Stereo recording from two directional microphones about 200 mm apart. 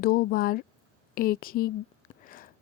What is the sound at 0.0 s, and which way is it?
Speech, 45° left (ahead or behind).